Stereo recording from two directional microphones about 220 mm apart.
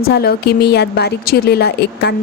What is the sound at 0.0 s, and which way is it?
A woman's voice, 45° left (ahead or behind).